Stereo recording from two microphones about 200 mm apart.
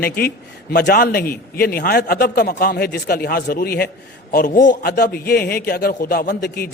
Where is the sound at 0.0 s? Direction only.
50° left (ahead or behind).